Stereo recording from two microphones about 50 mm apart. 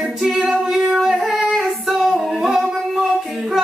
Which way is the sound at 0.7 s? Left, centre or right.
Centre.